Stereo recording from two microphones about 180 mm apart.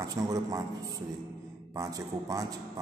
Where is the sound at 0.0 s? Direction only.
20° right (ahead or behind).